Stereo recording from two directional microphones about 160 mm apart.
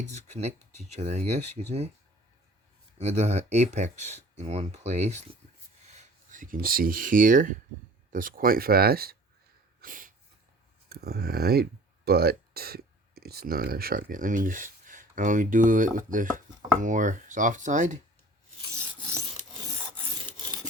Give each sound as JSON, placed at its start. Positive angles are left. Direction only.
{"t": 0.0, "sound": "speech", "side_deg": -45}
{"t": 3.0, "sound": "speech", "side_deg": -45}
{"t": 9.8, "sound": "snort", "side_deg": -60}
{"t": 10.8, "sound": "speech", "side_deg": -80}
{"t": 19.6, "sound": "filing", "side_deg": -30}